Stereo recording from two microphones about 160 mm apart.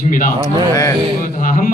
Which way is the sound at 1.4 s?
55° left (ahead or behind).